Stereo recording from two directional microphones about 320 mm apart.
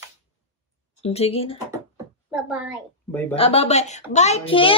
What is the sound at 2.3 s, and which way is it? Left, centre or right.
Speech, centre.